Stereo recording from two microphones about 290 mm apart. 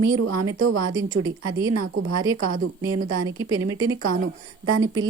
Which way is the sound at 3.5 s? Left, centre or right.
Right.